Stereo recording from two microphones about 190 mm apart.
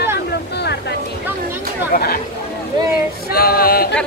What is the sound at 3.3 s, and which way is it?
Music, 55° left (ahead or behind).